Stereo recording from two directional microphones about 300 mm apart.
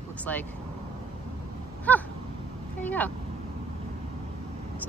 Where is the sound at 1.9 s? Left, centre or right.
Centre.